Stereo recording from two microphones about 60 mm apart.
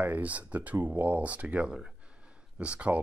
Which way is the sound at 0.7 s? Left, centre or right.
Right.